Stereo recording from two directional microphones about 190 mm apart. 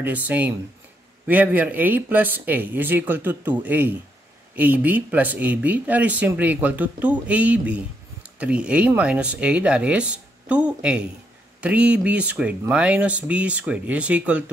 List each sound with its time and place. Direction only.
0.0 s speech: 10° right (ahead or behind)